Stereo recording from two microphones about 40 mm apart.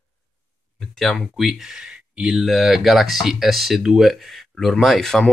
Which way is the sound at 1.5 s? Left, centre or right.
Centre.